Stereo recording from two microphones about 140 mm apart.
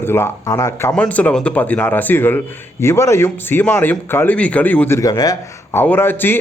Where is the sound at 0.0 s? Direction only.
15° left (ahead or behind).